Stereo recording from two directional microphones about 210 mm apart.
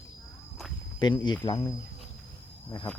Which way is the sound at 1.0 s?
20° left (ahead or behind).